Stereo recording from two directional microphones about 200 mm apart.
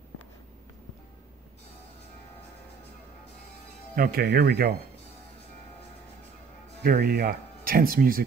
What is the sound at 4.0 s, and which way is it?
Speech, 50° right (ahead or behind).